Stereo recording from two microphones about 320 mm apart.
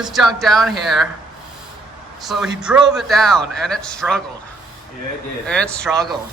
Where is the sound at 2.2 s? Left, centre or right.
Centre.